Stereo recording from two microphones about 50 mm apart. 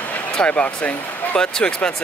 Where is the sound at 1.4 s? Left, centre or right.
Centre.